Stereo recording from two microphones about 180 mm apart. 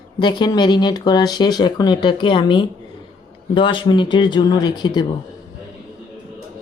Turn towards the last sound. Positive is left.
turn(degrees=25)  # may be behind; listen again after turning